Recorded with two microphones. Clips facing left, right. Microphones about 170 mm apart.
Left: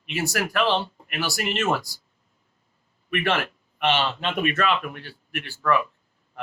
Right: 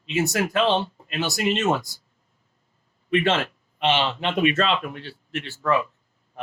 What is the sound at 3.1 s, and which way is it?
A man's voice, 25° right (ahead or behind).